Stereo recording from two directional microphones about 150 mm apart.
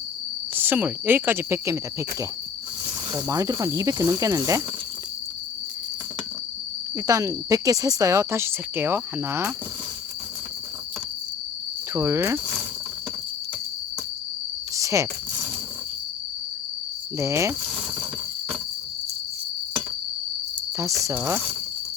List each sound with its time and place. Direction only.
0.5 s speech: 15° right (ahead or behind)
3.2 s speech: 25° right (ahead or behind)
6.9 s speech: 20° right (ahead or behind)
11.9 s speech: 20° right (ahead or behind)
14.8 s cricket: 20° right (ahead or behind)
17.2 s speech: 20° right (ahead or behind)
21.0 s speech: 20° right (ahead or behind)